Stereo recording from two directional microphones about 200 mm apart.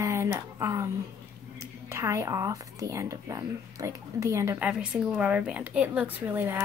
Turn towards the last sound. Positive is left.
turn(degrees=-10)  # may be behind; listen again after turning